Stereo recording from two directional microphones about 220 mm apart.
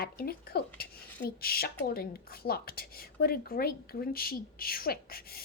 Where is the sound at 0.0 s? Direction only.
45° left (ahead or behind).